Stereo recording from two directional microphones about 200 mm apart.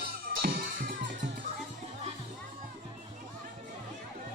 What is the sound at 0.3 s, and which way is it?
Music, 45° right (ahead or behind).